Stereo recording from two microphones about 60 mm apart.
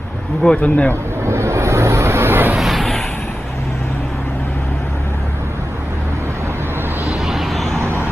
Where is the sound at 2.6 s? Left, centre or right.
Centre.